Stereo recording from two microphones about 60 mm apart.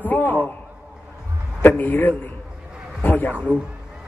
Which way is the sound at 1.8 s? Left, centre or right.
Left.